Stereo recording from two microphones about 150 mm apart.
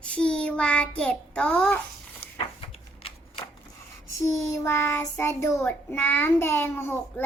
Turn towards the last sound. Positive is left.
turn(degrees=15)  # may be behind; listen again after turning